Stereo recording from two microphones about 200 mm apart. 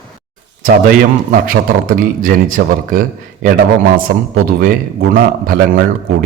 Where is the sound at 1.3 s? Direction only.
45° right (ahead or behind).